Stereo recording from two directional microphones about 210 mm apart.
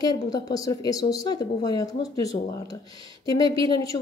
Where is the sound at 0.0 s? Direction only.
15° left (ahead or behind).